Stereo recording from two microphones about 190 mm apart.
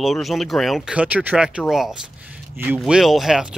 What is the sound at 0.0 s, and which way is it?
Speech, centre (ahead or behind).